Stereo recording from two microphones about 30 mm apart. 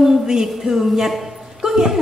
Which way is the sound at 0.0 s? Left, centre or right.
Centre.